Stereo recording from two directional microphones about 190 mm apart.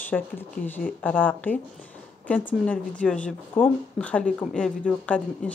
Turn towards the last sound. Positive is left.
turn(degrees=5)  # may be behind; listen again after turning